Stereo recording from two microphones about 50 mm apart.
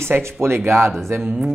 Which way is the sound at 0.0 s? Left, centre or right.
Right.